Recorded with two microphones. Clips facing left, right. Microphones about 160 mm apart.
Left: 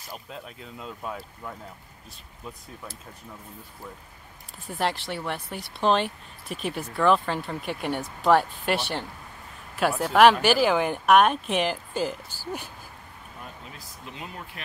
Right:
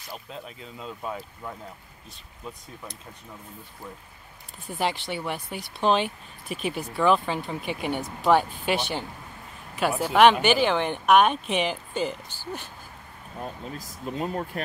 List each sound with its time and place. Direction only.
0.3 s speech: centre (ahead or behind)
4.6 s speech: centre (ahead or behind)
13.4 s speech: 40° right (ahead or behind)